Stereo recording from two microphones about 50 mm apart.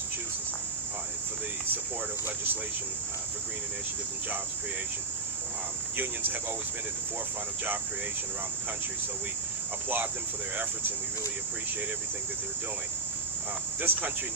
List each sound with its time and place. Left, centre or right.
13.7 s speech: right